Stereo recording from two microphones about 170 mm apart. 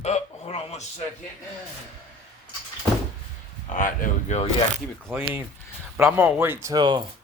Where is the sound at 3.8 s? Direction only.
45° left (ahead or behind).